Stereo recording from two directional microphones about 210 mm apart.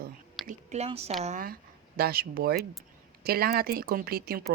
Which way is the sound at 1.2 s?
35° right (ahead or behind).